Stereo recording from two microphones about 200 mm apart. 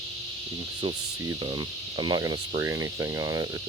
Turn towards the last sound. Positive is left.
turn(degrees=-20)  # may be behind; listen again after turning